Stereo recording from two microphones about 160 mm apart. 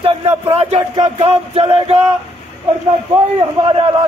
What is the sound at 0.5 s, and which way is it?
A man's voice, 40° right (ahead or behind).